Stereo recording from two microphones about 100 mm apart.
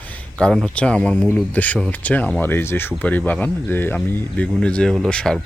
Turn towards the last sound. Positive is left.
turn(degrees=5)  # may be behind; listen again after turning